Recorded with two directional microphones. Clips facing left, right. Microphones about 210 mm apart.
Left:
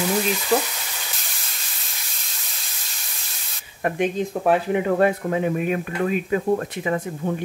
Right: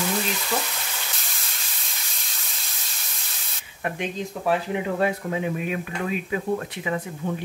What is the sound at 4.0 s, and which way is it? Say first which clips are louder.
Speech: left 7 dB; 55° left (ahead or behind).